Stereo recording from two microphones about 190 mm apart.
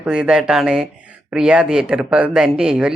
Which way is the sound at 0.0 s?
5° right (ahead or behind).